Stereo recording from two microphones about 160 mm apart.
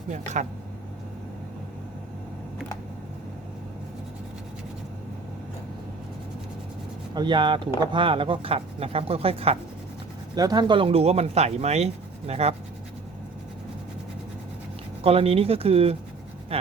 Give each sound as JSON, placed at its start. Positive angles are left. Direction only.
{"t": 7.1, "sound": "speech", "side_deg": -25}
{"t": 10.3, "sound": "speech", "side_deg": -25}
{"t": 15.0, "sound": "speech", "side_deg": -40}
{"t": 16.5, "sound": "a sound", "side_deg": -40}